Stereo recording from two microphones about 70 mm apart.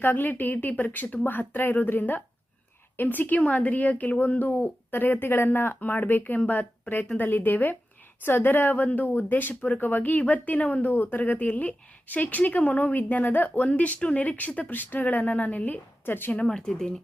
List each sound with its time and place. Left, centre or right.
0.0 s speech: left
16.5 s speech: centre